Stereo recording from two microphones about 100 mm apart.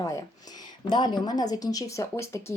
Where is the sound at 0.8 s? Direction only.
45° left (ahead or behind); by 2.4 s 30° left (ahead or behind).